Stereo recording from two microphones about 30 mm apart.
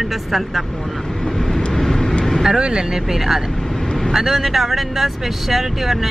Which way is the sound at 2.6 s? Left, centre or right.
Right.